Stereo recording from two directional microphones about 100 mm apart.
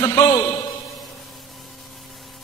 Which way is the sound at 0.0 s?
35° left (ahead or behind).